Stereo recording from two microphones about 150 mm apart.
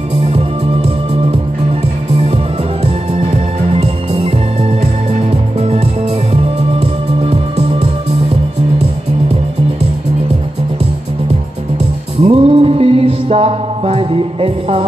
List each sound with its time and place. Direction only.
0.3 s music: 40° right (ahead or behind)
7.2 s music: 40° right (ahead or behind)
12.3 s music: 40° right (ahead or behind)